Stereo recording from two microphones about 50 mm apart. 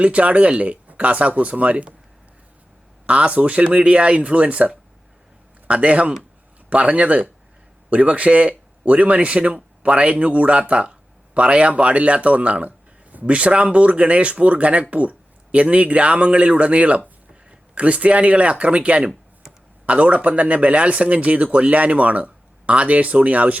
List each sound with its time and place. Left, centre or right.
0.0 s speech: right
3.1 s speech: right